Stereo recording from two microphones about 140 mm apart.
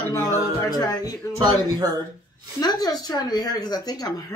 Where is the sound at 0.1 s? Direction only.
25° left (ahead or behind).